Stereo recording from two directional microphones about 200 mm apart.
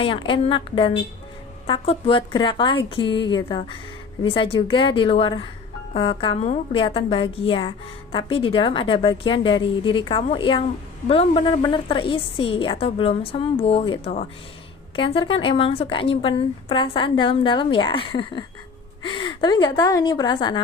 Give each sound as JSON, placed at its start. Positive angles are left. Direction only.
{"t": 0.0, "sound": "a woman's voice", "side_deg": 25}